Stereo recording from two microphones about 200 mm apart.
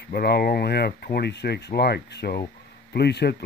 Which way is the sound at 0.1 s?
50° left (ahead or behind).